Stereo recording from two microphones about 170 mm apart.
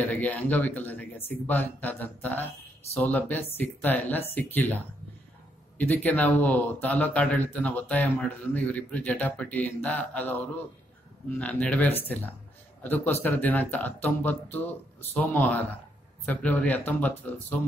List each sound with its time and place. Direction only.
0.0 s speech: 10° left (ahead or behind)
11.3 s speech: 10° left (ahead or behind)